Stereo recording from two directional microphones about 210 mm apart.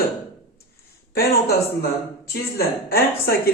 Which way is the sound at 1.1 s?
45° left (ahead or behind).